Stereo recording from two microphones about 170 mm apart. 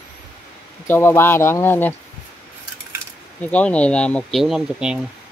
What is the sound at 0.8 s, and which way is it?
Speech, 15° left (ahead or behind).